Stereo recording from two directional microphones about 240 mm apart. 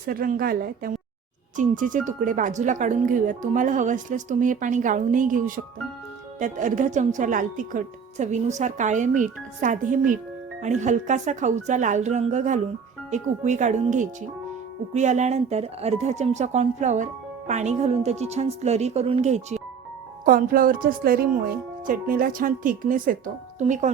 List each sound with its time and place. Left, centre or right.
0.0 s speech: right